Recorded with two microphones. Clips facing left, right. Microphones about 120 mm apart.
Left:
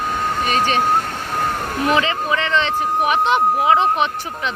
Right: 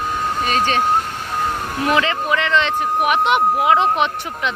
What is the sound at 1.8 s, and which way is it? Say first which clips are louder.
Speech: even; 20° left (ahead or behind).